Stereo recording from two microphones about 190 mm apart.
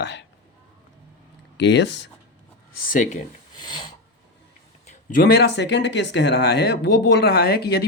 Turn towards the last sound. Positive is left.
turn(degrees=60)  # may be behind; listen again after turning